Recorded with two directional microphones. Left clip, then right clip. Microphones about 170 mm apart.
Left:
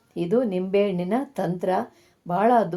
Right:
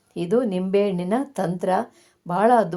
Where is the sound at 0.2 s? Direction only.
30° right (ahead or behind).